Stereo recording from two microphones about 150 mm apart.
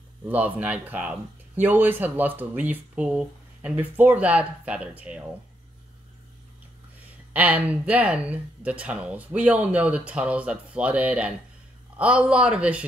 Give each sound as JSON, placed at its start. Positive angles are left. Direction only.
{"t": 0.2, "sound": "speech", "side_deg": -10}
{"t": 7.3, "sound": "speech", "side_deg": -10}